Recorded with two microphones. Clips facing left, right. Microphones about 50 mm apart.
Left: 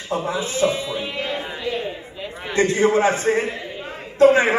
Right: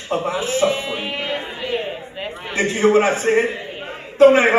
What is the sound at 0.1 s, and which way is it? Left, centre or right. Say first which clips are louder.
A man's voice: right 3 dB; right.